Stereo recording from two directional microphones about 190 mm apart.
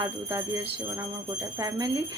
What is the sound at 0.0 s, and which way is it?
Speech, 15° right (ahead or behind).